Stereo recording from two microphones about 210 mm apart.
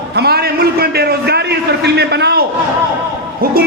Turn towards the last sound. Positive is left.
turn(degrees=-45)  # may be behind; listen again after turning